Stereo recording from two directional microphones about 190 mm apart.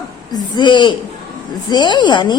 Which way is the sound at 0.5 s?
25° left (ahead or behind).